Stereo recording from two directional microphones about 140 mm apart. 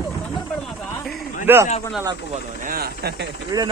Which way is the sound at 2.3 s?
80° right.